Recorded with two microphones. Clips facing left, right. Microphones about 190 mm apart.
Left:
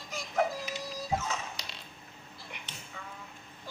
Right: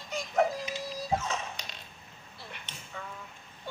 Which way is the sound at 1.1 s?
30° right (ahead or behind).